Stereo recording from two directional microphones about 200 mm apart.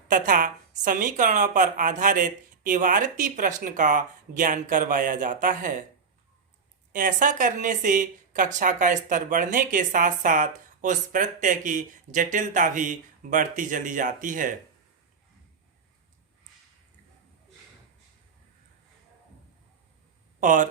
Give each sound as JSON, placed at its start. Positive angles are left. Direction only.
{"t": 0.1, "sound": "speech", "side_deg": -45}
{"t": 6.9, "sound": "speech", "side_deg": -40}
{"t": 20.4, "sound": "speech", "side_deg": -40}